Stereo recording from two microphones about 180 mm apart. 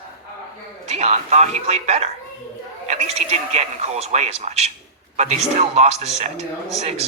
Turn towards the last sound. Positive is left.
turn(degrees=-35)  # may be behind; listen again after turning